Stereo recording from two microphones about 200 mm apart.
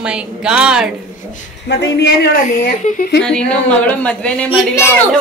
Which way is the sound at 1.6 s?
55° left (ahead or behind).